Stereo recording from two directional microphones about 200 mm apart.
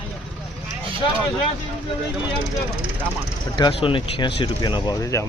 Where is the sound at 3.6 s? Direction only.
25° left (ahead or behind).